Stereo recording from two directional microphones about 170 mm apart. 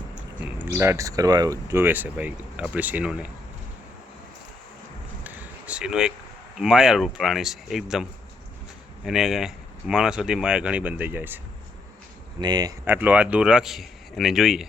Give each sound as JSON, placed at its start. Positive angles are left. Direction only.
{"t": 0.3, "sound": "speech", "side_deg": -10}
{"t": 5.2, "sound": "a sound", "side_deg": -10}
{"t": 6.6, "sound": "speech", "side_deg": -5}
{"t": 9.0, "sound": "speech", "side_deg": 0}
{"t": 12.4, "sound": "speech", "side_deg": -25}
{"t": 12.8, "sound": "speech", "side_deg": -10}